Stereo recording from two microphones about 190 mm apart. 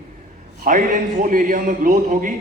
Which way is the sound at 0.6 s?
45° right (ahead or behind).